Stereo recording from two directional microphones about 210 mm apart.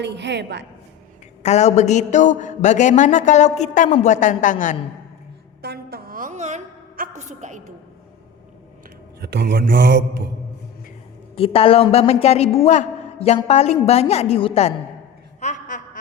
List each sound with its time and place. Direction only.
0.0 s mantra: 55° right (ahead or behind)
1.4 s a man's voice: 30° left (ahead or behind)
5.6 s a sound: 50° right (ahead or behind)
9.2 s mantra: 55° right (ahead or behind)
11.3 s a woman's voice: 25° left (ahead or behind)
15.4 s a sound: 35° left (ahead or behind)